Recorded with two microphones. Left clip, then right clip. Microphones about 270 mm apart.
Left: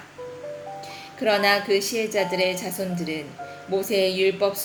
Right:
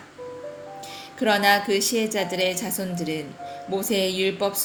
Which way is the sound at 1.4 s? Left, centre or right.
Right.